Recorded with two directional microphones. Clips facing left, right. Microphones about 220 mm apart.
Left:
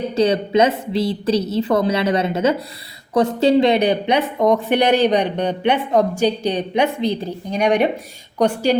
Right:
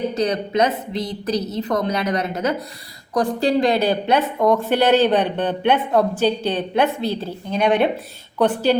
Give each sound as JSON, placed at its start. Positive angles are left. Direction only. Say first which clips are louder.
{"t": 0.1, "sound": "a woman's voice", "louder": "left 4 dB", "side_deg": 30}